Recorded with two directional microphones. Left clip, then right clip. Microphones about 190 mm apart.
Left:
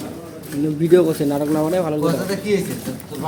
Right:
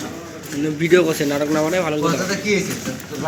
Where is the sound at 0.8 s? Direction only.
45° left (ahead or behind).